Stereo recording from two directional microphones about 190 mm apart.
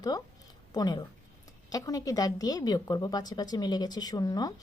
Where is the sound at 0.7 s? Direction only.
20° left (ahead or behind).